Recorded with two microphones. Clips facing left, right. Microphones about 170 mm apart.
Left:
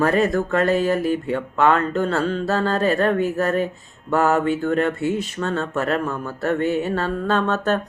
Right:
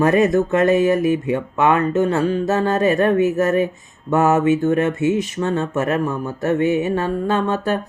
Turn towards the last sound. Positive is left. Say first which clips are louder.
# right 1 dB
turn(degrees=-10)  # may be behind; listen again after turning